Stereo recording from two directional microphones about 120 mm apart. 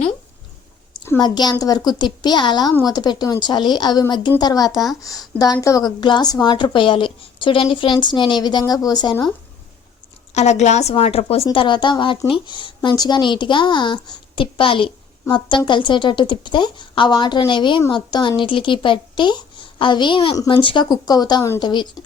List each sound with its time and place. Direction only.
1.2 s speech: 35° left (ahead or behind)
10.3 s a woman's voice: 70° left (ahead or behind); by 11.4 s 55° left (ahead or behind)
11.5 s speech: 40° left (ahead or behind)
20.3 s speech: 30° left (ahead or behind)
20.6 s speech: 40° left (ahead or behind)